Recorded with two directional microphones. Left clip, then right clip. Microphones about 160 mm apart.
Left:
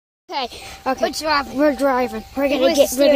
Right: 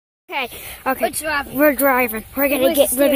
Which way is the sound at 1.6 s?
Centre (ahead or behind).